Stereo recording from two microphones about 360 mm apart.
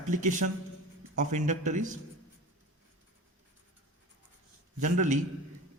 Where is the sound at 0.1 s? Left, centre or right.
Right.